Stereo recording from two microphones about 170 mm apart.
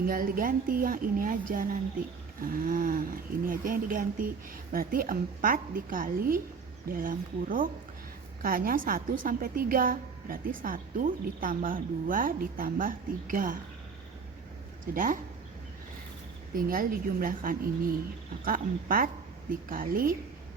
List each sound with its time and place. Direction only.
0.0 s a woman's voice: 55° right (ahead or behind)
14.9 s a woman's voice: 50° right (ahead or behind)
16.6 s a woman's voice: 55° right (ahead or behind)